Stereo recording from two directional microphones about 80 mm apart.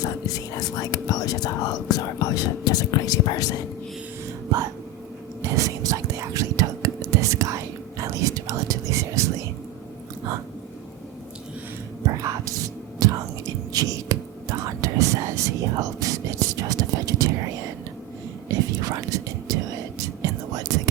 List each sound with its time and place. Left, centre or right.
0.0 s speech: left
5.4 s whispering: right
12.0 s whispering: right
18.4 s whispering: right